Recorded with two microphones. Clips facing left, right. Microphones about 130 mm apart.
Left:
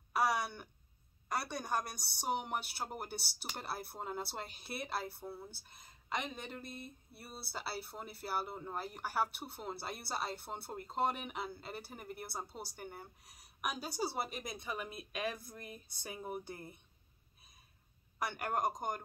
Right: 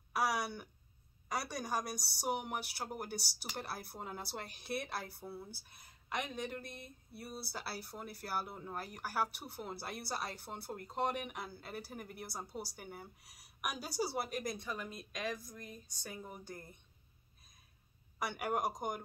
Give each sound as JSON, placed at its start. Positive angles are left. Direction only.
{"t": 0.1, "sound": "a sound", "side_deg": 0}
{"t": 1.3, "sound": "speech", "side_deg": 0}
{"t": 5.2, "sound": "speech", "side_deg": 25}
{"t": 5.7, "sound": "speech", "side_deg": 0}
{"t": 15.3, "sound": "speech", "side_deg": 30}
{"t": 16.3, "sound": "speech", "side_deg": 10}
{"t": 18.2, "sound": "speech", "side_deg": -5}